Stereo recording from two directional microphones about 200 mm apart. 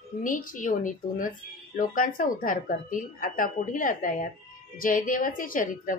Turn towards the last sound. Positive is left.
turn(degrees=45)  # may be behind; listen again after turning